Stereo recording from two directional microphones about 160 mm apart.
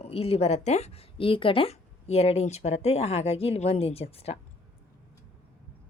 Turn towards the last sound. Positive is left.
turn(degrees=40)  # may be behind; listen again after turning